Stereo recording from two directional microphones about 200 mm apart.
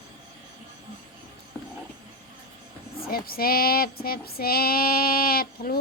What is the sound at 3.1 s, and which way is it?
Female singing, 50° left (ahead or behind).